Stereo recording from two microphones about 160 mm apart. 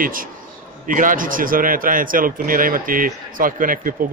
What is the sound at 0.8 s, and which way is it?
A man's voice, 55° right (ahead or behind).